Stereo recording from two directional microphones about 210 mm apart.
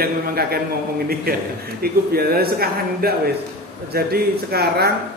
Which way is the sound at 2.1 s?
45° right (ahead or behind).